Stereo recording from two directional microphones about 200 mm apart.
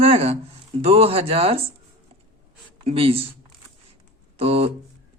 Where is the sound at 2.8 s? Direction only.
30° right (ahead or behind).